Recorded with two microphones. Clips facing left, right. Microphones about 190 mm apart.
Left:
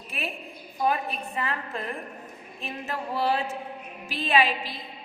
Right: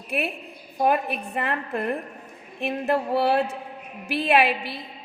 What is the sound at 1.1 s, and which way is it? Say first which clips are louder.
A woman's voice: right 4 dB; 65° right (ahead or behind).